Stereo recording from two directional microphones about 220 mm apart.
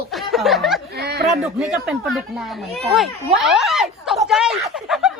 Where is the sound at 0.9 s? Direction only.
45° right (ahead or behind).